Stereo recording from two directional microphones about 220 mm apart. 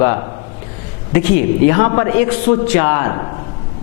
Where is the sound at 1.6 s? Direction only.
15° left (ahead or behind).